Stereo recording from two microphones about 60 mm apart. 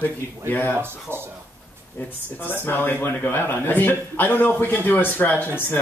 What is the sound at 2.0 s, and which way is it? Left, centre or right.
A man's voice, left.